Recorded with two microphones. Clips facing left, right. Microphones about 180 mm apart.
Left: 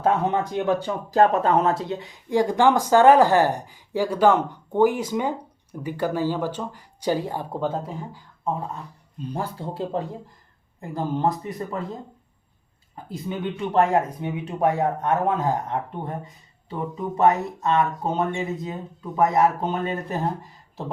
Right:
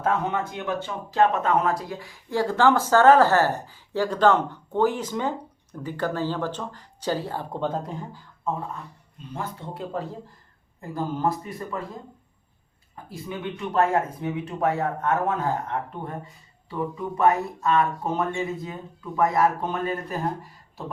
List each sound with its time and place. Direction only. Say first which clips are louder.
0.0 s speech: left 3 dB; 35° left (ahead or behind); by 8.5 s 10° left (ahead or behind)
9.3 s speech: left 3 dB; 35° left (ahead or behind)
13.1 s speech: left 4 dB; 30° left (ahead or behind)